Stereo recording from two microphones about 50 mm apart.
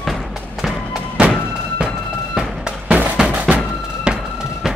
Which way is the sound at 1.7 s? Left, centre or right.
Centre.